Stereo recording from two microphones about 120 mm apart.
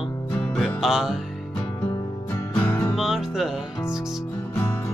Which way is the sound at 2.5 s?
15° left (ahead or behind).